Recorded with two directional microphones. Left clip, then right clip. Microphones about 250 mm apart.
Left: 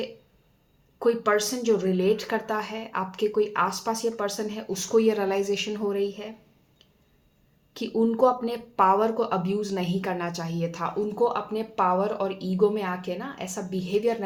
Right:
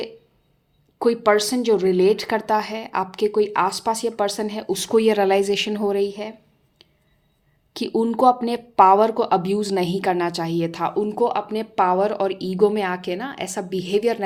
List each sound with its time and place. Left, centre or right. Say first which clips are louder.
0.9 s speech: right 5 dB; right
7.7 s speech: right 3 dB; right